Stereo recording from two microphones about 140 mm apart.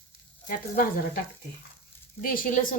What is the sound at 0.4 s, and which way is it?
Speech, 85° left.